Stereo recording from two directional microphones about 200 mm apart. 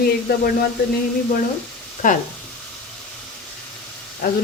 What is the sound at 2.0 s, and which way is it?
Speech, 40° left (ahead or behind).